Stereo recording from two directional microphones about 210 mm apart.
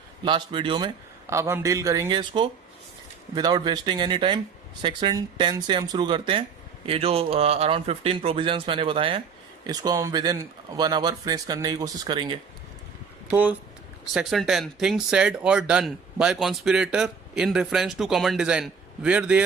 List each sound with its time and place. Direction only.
0.3 s speech: 20° right (ahead or behind)
13.3 s speech: 10° right (ahead or behind)